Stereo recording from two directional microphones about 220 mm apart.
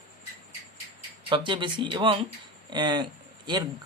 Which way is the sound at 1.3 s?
20° right (ahead or behind).